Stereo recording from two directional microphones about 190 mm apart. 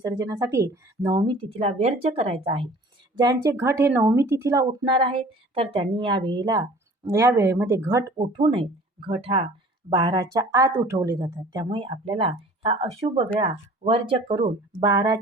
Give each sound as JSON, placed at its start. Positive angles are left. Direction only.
{"t": 0.0, "sound": "speech", "side_deg": -20}
{"t": 3.2, "sound": "speech", "side_deg": -20}
{"t": 8.2, "sound": "speech", "side_deg": -25}
{"t": 11.6, "sound": "speech", "side_deg": -25}